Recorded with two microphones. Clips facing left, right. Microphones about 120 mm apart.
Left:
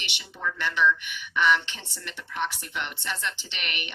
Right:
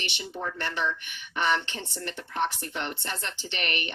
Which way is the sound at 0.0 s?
40° right (ahead or behind).